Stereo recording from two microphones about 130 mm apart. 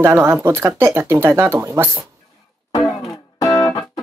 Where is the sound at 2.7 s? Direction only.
30° left (ahead or behind).